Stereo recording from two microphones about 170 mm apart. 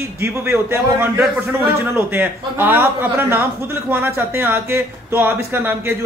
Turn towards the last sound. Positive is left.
turn(degrees=-15)  # may be behind; listen again after turning